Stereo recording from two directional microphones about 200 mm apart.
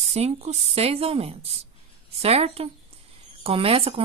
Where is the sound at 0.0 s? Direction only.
30° right (ahead or behind).